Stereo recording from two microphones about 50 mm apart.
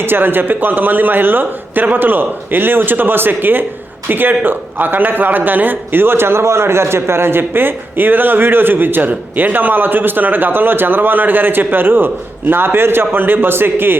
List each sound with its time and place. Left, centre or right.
0.0 s a man's voice: right